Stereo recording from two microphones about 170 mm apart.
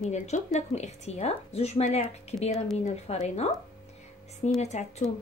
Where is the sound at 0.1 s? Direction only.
45° left (ahead or behind).